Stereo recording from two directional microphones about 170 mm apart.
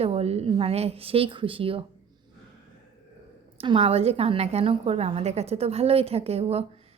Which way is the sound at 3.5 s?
30° right (ahead or behind).